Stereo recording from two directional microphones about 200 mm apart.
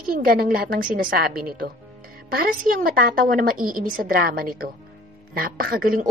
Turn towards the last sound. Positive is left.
turn(degrees=-45)  # may be behind; listen again after turning